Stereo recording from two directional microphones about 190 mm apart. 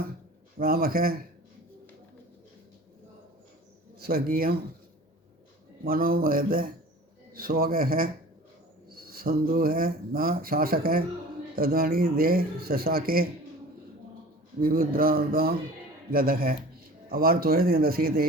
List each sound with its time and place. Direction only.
0.6 s speech: 50° right (ahead or behind)
4.0 s speech: 50° right (ahead or behind)
5.8 s speech: 50° right (ahead or behind)
14.6 s speech: 50° right (ahead or behind)